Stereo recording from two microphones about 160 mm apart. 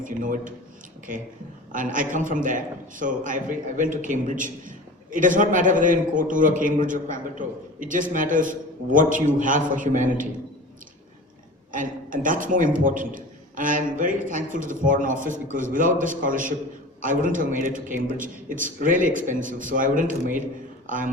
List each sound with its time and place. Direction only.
0.0 s a man's voice: 55° right (ahead or behind)
1.7 s a man's voice: 55° right (ahead or behind)
11.7 s a man's voice: 55° right (ahead or behind)